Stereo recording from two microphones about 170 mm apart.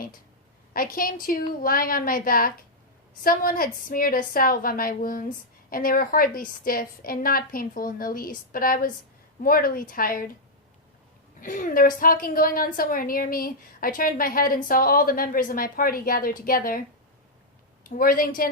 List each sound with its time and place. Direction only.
0.7 s a woman's voice: 55° left (ahead or behind)
11.3 s a woman's voice: 55° left (ahead or behind)
17.8 s a woman's voice: 55° left (ahead or behind)